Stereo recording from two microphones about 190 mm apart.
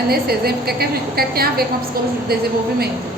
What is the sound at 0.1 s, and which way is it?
A woman's voice, 55° right (ahead or behind).